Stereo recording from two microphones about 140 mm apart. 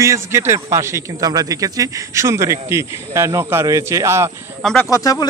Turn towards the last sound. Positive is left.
turn(degrees=25)  # may be behind; listen again after turning